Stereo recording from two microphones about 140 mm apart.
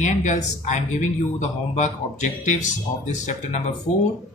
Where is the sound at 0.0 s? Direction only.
60° left (ahead or behind).